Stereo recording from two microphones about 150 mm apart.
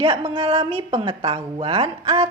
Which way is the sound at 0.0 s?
35° right (ahead or behind).